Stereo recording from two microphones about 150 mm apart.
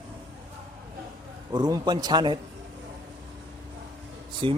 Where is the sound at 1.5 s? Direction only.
30° right (ahead or behind).